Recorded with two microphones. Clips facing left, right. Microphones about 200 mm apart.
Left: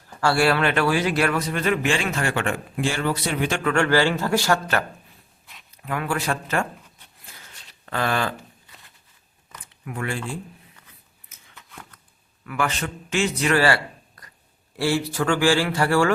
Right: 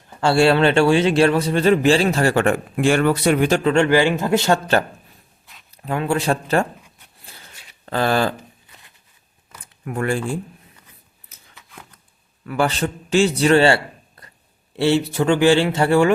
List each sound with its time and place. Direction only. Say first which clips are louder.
0.2 s a man's voice: right 5 dB; 25° right (ahead or behind); by 3.5 s 55° right (ahead or behind)
3.6 s speech: right 4 dB; 25° right (ahead or behind)
7.9 s a man's voice: right 6 dB; 30° right (ahead or behind)
9.8 s speech: right 7 dB; 45° right (ahead or behind)
12.5 s a man's voice: right 6 dB; 35° right (ahead or behind)